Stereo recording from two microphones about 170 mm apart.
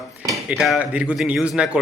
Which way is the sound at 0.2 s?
20° right (ahead or behind).